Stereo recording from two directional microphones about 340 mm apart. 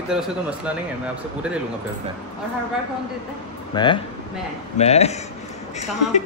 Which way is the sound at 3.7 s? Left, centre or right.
Centre.